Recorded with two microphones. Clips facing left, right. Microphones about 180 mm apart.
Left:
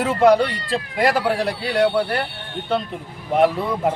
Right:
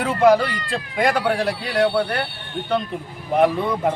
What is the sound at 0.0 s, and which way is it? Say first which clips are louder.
Speech: left 1 dB; centre (ahead or behind).